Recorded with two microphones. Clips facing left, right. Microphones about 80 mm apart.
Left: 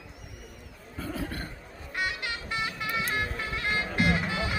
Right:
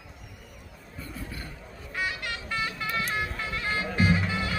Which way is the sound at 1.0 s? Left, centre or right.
Left.